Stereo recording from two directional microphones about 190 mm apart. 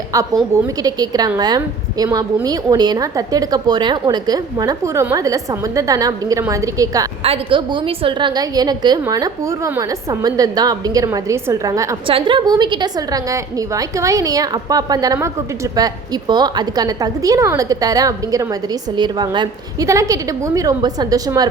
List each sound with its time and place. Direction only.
0.5 s a woman's voice: 20° right (ahead or behind)
7.2 s a woman's voice: 30° right (ahead or behind)
12.0 s a woman's voice: 25° right (ahead or behind)